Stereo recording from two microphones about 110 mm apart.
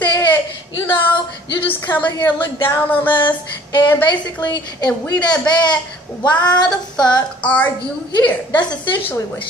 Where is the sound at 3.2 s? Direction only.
45° left (ahead or behind).